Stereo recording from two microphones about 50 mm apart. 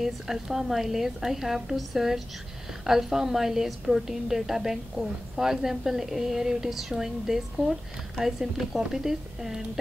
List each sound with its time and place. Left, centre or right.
0.0 s a woman's voice: centre